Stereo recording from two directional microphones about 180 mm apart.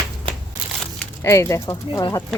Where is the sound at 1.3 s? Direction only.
15° left (ahead or behind).